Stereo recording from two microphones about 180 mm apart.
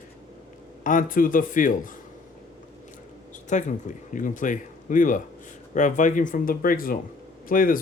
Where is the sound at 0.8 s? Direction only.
50° left (ahead or behind).